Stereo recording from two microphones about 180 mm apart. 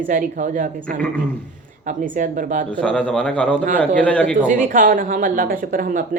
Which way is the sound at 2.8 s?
5° left (ahead or behind).